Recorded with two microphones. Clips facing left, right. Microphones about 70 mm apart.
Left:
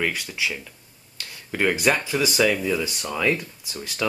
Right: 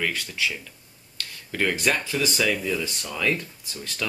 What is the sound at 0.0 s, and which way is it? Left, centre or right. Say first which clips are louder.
Speech: left 1 dB; centre.